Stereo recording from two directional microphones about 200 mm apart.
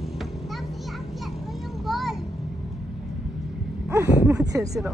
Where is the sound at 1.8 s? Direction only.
Centre (ahead or behind).